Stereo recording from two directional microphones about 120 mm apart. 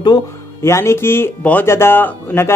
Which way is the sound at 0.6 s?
20° left (ahead or behind).